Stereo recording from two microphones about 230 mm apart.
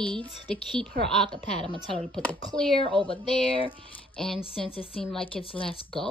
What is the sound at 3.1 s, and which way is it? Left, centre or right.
Speech, left.